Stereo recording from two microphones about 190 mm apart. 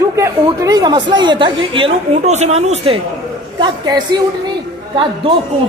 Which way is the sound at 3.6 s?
20° right (ahead or behind).